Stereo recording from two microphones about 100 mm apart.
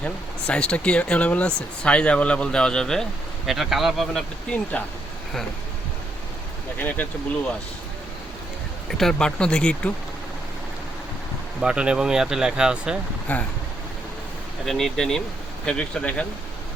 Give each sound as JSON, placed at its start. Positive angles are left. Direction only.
{"t": 0.0, "sound": "speech", "side_deg": 10}
{"t": 6.7, "sound": "speech", "side_deg": 15}
{"t": 8.9, "sound": "speech", "side_deg": 5}
{"t": 11.6, "sound": "speech", "side_deg": -10}
{"t": 13.3, "sound": "speech", "side_deg": 15}
{"t": 14.6, "sound": "speech", "side_deg": 0}